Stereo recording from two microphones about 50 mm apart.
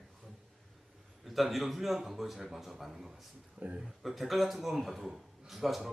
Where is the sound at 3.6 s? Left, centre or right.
Right.